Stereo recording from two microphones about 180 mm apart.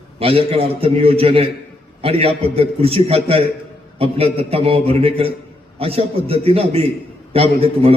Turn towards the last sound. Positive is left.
turn(degrees=-30)  # may be behind; listen again after turning